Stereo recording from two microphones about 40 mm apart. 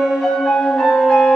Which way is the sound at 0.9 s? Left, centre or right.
Centre.